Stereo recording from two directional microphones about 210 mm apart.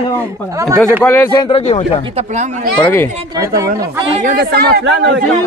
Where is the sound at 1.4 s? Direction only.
30° left (ahead or behind).